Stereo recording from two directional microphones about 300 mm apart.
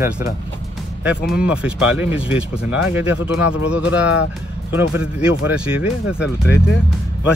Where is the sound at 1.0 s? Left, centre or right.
Centre.